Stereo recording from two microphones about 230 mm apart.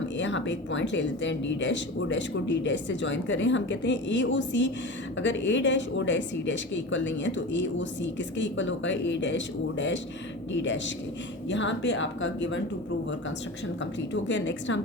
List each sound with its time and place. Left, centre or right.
0.2 s speech: left
14.1 s speech: left